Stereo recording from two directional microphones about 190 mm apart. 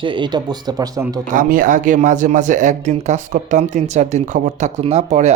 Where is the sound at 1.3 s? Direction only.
45° right (ahead or behind).